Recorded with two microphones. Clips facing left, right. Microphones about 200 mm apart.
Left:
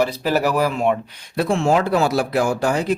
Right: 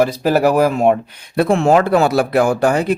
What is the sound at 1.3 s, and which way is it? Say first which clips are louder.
Speech: right 5 dB; 60° right (ahead or behind).